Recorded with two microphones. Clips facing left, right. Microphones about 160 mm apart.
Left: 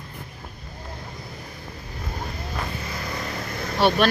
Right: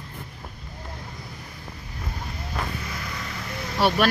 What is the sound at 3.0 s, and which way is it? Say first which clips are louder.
Vehicle: left 4 dB; 40° left (ahead or behind).